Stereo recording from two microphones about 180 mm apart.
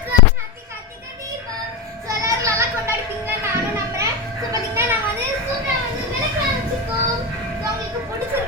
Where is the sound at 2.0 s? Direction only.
15° right (ahead or behind).